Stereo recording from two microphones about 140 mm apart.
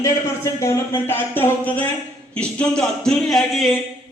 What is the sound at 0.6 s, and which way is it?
Speech, 15° left (ahead or behind).